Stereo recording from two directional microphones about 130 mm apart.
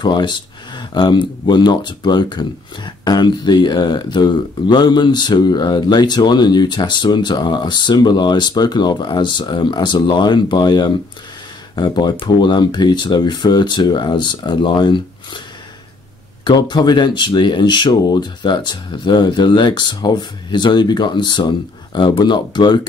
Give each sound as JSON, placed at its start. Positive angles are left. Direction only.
{"t": 0.0, "sound": "speech", "side_deg": 35}
{"t": 16.4, "sound": "speech", "side_deg": 35}